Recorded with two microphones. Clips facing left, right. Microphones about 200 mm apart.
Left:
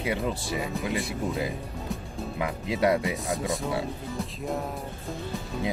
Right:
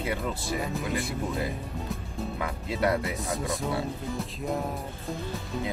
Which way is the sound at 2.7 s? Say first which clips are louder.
Left 3 dB; 20° left (ahead or behind).